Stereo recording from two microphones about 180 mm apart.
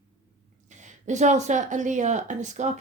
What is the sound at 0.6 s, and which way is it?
A woman's voice, 45° right (ahead or behind).